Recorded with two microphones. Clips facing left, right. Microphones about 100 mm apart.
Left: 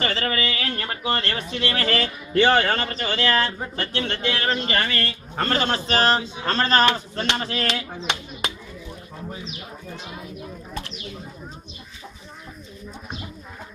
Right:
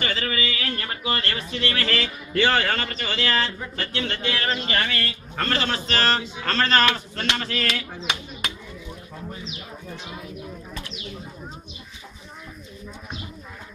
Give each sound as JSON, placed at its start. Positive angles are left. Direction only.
{"t": 0.0, "sound": "speech", "side_deg": 35}
{"t": 6.0, "sound": "speech", "side_deg": 20}